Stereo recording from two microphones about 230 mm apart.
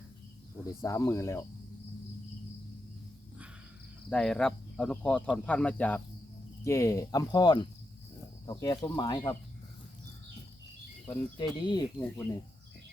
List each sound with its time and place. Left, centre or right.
0.8 s speech: centre
4.1 s speech: centre
11.1 s speech: centre